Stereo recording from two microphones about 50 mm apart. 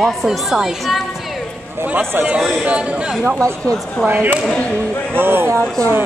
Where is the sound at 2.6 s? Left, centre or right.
Right.